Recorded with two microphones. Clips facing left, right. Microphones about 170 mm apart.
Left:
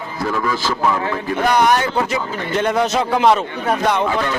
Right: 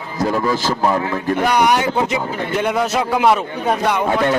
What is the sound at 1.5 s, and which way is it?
Speech, 10° right (ahead or behind).